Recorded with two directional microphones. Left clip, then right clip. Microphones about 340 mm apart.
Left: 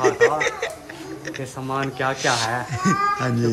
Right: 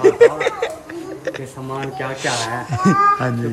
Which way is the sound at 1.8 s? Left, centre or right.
Centre.